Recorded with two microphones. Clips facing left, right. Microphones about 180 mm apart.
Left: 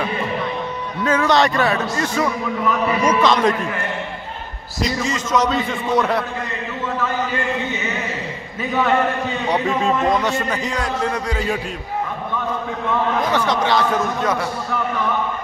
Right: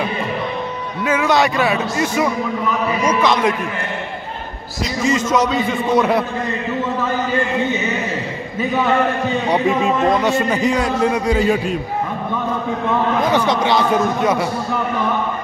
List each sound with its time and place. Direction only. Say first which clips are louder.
1.0 s a man's voice: even; 5° right (ahead or behind)
4.8 s a man's voice: right 4 dB; 10° right (ahead or behind)
9.5 s a man's voice: right 2 dB; 10° right (ahead or behind)
13.3 s a man's voice: right 2 dB; 15° right (ahead or behind)